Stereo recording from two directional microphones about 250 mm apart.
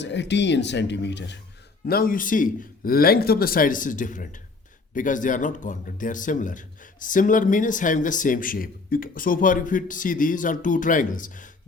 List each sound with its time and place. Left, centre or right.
0.0 s speech: left